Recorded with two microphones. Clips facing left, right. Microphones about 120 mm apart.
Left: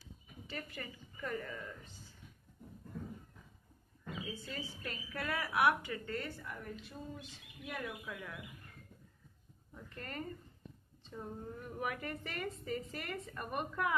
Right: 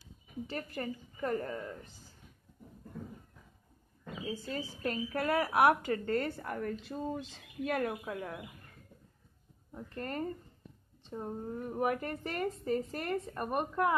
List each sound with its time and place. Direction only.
0.5 s a woman's voice: 40° right (ahead or behind)
4.2 s a woman's voice: 40° right (ahead or behind); by 7.9 s 65° right (ahead or behind)
8.0 s a woman's voice: 40° right (ahead or behind)
9.8 s a woman's voice: 40° right (ahead or behind)